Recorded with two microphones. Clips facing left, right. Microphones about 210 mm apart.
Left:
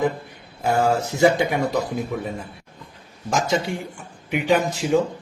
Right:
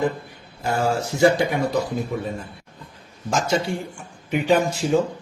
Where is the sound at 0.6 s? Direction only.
20° left (ahead or behind).